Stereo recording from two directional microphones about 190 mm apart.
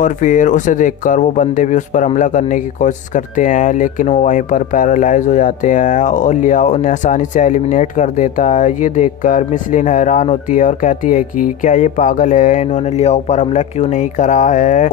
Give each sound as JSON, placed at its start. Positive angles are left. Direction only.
{"t": 0.0, "sound": "speech", "side_deg": 40}